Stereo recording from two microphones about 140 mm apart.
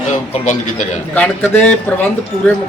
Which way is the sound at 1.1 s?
10° left (ahead or behind).